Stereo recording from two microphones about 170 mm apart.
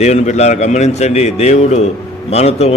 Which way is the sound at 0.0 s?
40° left (ahead or behind).